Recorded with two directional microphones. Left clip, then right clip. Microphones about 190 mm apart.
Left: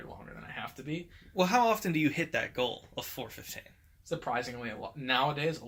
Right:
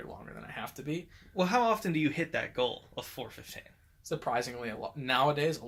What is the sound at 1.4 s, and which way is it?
Speech, 5° left (ahead or behind).